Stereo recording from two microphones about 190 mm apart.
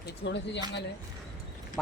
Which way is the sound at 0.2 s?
60° left (ahead or behind).